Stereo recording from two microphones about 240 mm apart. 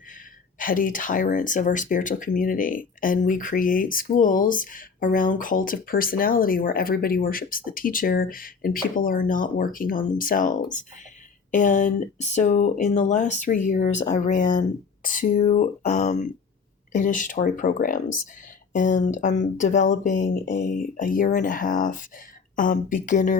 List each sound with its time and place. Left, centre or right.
0.6 s speech: left